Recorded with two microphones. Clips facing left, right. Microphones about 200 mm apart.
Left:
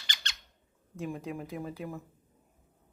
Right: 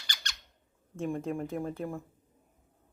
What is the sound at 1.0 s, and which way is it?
Speech, 5° left (ahead or behind).